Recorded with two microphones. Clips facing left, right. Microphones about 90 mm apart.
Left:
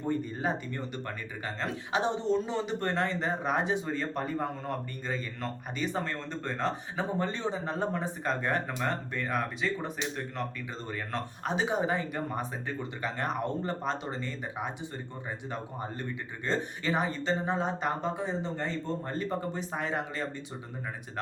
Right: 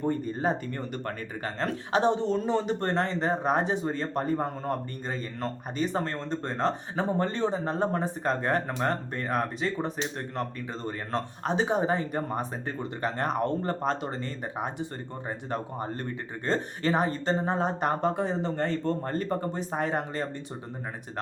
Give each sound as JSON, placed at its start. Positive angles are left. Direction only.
{"t": 0.0, "sound": "speech", "side_deg": -40}